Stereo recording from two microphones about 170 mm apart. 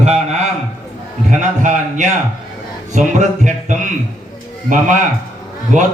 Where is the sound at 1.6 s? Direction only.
45° right (ahead or behind).